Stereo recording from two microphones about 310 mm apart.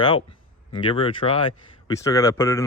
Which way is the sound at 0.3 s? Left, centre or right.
Centre.